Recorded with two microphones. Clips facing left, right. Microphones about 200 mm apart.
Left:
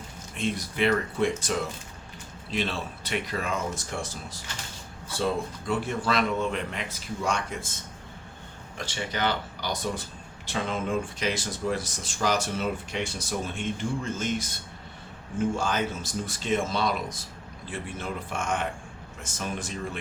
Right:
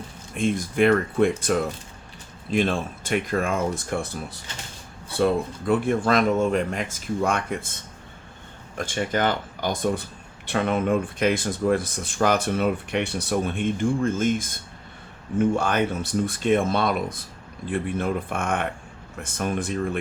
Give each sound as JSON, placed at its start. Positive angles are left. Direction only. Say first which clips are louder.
{"t": 0.3, "sound": "speech", "louder": "right 7 dB", "side_deg": -50}
{"t": 8.8, "sound": "speech", "louder": "right 6 dB", "side_deg": -50}
{"t": 15.4, "sound": "speech", "louder": "right 5 dB", "side_deg": -60}